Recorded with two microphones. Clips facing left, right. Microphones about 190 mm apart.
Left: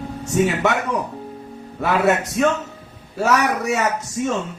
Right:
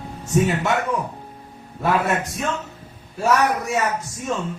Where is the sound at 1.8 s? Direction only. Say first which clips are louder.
Left 3 dB; 75° left (ahead or behind).